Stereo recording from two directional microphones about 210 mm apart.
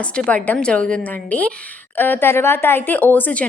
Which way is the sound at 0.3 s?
5° left (ahead or behind).